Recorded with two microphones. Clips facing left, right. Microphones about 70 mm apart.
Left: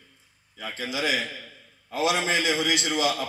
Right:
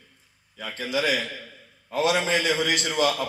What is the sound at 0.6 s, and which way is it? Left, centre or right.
A man's voice, right.